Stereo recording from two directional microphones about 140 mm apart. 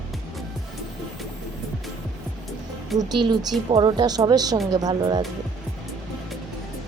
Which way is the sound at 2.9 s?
30° right (ahead or behind).